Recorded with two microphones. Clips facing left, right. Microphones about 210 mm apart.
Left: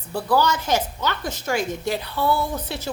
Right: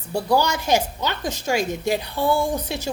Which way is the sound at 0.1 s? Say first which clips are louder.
Even; 15° right (ahead or behind).